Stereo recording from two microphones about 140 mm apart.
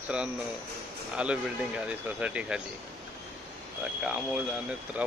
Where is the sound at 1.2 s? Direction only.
10° right (ahead or behind).